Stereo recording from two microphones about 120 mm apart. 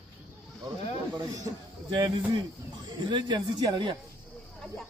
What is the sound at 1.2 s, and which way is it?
A man's voice, 30° right (ahead or behind).